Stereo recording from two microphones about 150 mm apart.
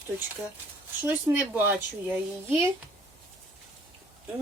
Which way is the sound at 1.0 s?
10° right (ahead or behind).